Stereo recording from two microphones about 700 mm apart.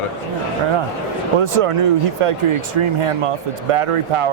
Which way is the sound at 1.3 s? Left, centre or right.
Right.